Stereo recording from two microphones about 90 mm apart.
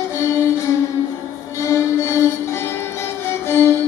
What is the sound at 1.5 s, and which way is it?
Music, 30° left (ahead or behind).